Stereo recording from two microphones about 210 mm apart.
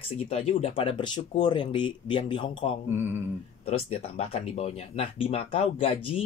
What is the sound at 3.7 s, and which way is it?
Speech, 30° left (ahead or behind).